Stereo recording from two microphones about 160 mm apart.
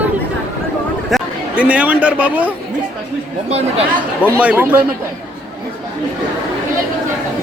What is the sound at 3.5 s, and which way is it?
Speech, 40° right (ahead or behind).